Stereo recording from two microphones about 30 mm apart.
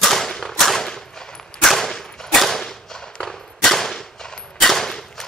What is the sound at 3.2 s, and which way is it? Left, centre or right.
Gunshot, centre.